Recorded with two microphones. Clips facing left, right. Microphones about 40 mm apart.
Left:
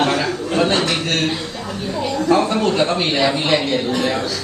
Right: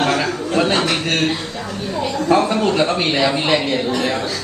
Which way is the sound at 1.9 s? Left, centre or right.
Centre.